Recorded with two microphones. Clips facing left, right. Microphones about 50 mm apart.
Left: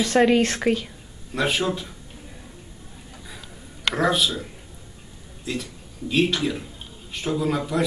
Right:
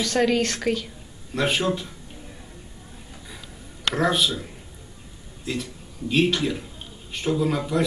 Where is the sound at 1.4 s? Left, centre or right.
Centre.